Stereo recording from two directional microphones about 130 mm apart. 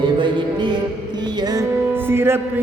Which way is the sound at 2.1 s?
20° right (ahead or behind).